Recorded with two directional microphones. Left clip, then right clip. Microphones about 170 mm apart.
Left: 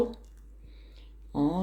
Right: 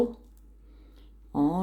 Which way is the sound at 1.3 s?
15° right (ahead or behind).